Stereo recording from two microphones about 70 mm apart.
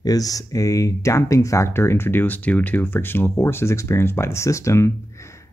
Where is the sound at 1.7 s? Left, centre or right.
Left.